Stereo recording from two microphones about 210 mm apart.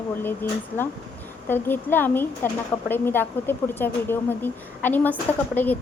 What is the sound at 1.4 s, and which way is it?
A woman's voice, 10° left (ahead or behind).